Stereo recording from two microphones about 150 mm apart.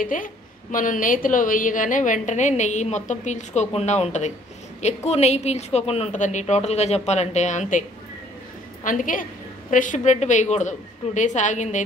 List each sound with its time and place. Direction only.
0.0 s a woman's voice: 65° left (ahead or behind)
8.8 s a woman's voice: 60° left (ahead or behind)